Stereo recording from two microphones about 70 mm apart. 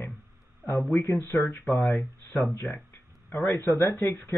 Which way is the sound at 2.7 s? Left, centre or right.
Centre.